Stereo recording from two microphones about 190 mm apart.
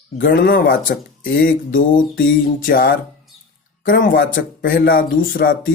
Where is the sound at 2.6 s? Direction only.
50° left (ahead or behind).